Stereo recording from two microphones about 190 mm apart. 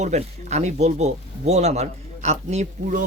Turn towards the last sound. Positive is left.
turn(degrees=-40)  # may be behind; listen again after turning